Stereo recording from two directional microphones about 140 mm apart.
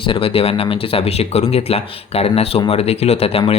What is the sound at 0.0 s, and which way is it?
Speech, 40° left (ahead or behind).